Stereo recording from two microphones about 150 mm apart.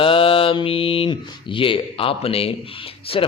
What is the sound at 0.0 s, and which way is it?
A man's voice, 35° left (ahead or behind).